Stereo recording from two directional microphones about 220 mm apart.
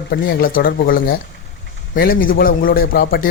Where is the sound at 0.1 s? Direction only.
45° left (ahead or behind).